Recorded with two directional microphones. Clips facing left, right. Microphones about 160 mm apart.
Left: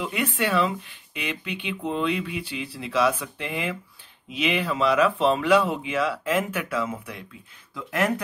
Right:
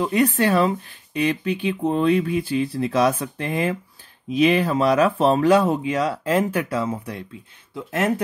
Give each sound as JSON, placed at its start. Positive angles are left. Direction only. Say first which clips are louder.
{"t": 0.0, "sound": "speech", "louder": "right 7 dB", "side_deg": -40}